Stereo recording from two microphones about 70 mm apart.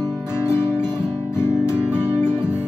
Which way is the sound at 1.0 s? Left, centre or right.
Left.